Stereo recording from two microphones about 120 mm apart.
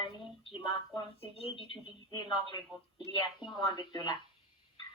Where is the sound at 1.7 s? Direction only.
40° left (ahead or behind).